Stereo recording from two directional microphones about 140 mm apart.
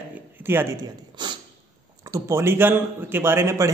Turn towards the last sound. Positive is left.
turn(degrees=-20)  # may be behind; listen again after turning